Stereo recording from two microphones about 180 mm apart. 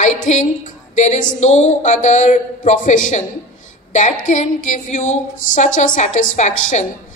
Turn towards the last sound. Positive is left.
turn(degrees=45)  # may be behind; listen again after turning